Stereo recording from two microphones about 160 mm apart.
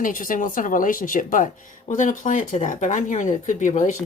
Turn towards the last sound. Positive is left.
turn(degrees=50)  # may be behind; listen again after turning